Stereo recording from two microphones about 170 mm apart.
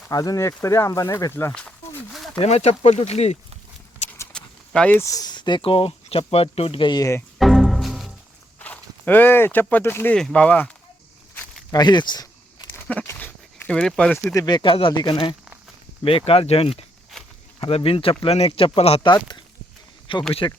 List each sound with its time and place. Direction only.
0.1 s speech: 20° left (ahead or behind)
1.5 s a sound: 5° left (ahead or behind)
2.4 s speech: 40° left (ahead or behind)
4.3 s speech: 5° left (ahead or behind)
7.3 s music: centre (ahead or behind)
8.5 s speech: 10° left (ahead or behind)
11.7 s a sound: 25° left (ahead or behind)
12.9 s a sound: 10° left (ahead or behind)
14.3 s speech: 25° left (ahead or behind)